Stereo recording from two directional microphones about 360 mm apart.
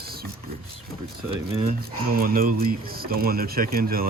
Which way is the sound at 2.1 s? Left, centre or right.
Right.